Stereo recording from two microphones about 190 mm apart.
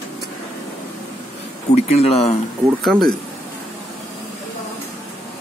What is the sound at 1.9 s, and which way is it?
Speech, 30° left (ahead or behind).